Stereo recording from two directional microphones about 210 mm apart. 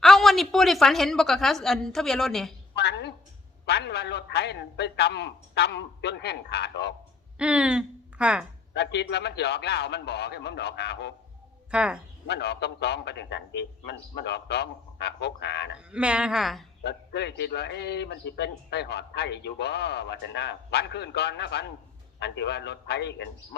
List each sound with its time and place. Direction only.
0.0 s a woman's voice: centre (ahead or behind)
2.7 s a woman's voice: 55° left (ahead or behind)
7.3 s speech: 5° right (ahead or behind)
8.7 s a man's voice: 55° left (ahead or behind)
11.7 s a woman's voice: 5° right (ahead or behind)
12.3 s a man's voice: 55° left (ahead or behind)
15.9 s a woman's voice: 5° right (ahead or behind)
16.8 s a man's voice: 55° left (ahead or behind)